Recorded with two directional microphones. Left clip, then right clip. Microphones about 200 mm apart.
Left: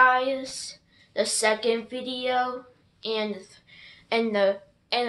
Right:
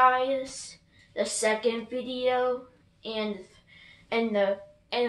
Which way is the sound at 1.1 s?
55° left (ahead or behind).